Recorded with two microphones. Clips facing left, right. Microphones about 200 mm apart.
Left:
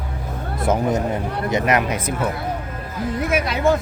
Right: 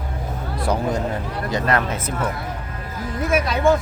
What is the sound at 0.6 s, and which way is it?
Speech, 20° left (ahead or behind).